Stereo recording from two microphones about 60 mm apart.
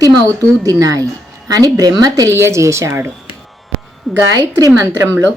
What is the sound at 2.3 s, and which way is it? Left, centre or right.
Speech, right.